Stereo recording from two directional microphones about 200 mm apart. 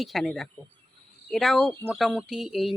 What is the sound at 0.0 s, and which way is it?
Speech, centre (ahead or behind).